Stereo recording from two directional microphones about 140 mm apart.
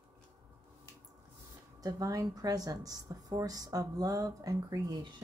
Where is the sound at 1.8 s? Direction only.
25° right (ahead or behind).